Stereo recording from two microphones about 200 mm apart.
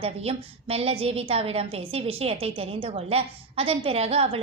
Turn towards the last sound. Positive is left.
turn(degrees=-30)  # may be behind; listen again after turning